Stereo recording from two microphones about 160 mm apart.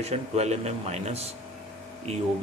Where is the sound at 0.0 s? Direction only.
40° right (ahead or behind).